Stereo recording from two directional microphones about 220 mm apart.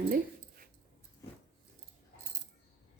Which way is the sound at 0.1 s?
40° right (ahead or behind).